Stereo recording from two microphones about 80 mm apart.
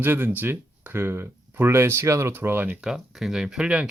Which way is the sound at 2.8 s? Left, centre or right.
Centre.